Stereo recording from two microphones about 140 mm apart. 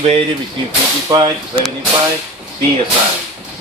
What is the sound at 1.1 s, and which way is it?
Speech, 35° right (ahead or behind).